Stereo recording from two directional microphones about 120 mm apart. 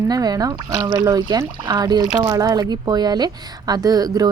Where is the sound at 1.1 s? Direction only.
30° right (ahead or behind).